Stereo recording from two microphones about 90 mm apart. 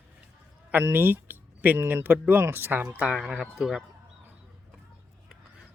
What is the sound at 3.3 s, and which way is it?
Speech, 10° right (ahead or behind).